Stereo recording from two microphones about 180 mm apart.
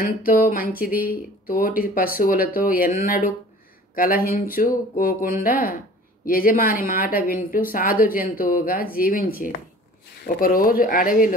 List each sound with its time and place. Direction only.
0.5 s speech: 50° left (ahead or behind)